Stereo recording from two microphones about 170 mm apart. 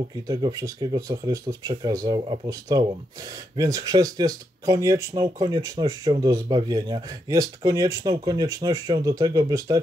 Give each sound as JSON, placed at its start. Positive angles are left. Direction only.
{"t": 0.3, "sound": "speech", "side_deg": -20}